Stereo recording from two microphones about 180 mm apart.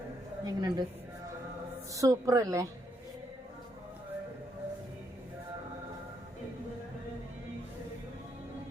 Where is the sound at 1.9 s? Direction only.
15° right (ahead or behind).